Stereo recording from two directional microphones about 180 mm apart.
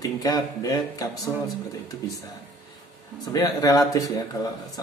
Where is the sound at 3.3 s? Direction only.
20° left (ahead or behind).